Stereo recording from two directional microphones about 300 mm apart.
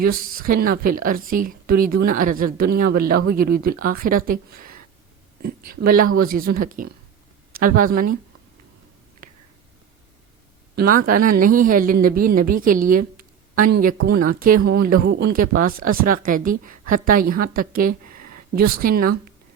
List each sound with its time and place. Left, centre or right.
0.0 s speech: right
10.8 s speech: right
18.0 s a sound: right
18.5 s speech: right